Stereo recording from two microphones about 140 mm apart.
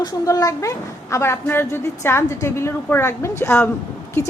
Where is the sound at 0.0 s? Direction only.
25° left (ahead or behind).